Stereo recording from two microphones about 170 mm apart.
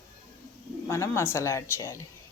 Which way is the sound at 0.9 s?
15° left (ahead or behind).